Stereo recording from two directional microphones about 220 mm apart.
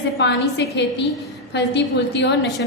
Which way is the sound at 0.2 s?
50° left (ahead or behind).